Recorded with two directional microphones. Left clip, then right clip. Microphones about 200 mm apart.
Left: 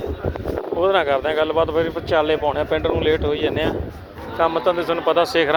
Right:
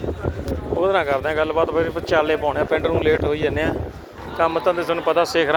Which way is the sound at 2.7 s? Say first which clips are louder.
Even; 10° right (ahead or behind).